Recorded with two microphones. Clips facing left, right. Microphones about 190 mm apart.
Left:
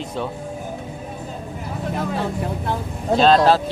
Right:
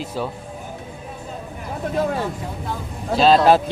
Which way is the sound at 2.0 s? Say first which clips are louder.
Right 2 dB; 65° left (ahead or behind).